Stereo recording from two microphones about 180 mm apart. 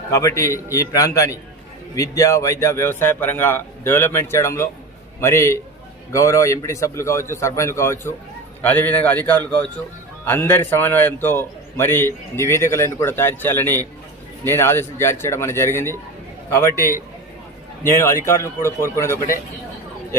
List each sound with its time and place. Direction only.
0.1 s a man's voice: 15° left (ahead or behind)
16.7 s a man's voice: 15° right (ahead or behind)
17.8 s a man's voice: 15° left (ahead or behind)